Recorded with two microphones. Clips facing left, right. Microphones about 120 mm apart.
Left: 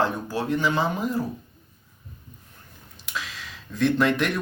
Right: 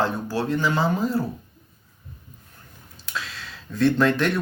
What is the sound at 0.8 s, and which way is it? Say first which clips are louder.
Speech: right 2 dB; 30° right (ahead or behind).